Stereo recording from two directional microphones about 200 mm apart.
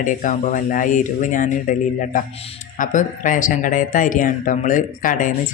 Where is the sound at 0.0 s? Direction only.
40° left (ahead or behind).